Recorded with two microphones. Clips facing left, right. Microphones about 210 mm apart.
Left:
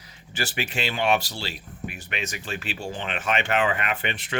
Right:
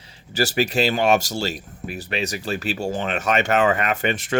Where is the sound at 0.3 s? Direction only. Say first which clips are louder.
Right 9 dB; 40° right (ahead or behind).